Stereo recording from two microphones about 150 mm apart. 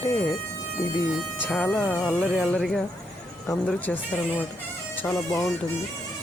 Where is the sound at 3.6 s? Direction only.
10° left (ahead or behind).